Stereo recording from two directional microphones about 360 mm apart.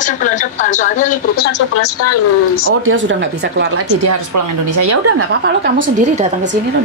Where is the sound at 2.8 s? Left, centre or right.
Right.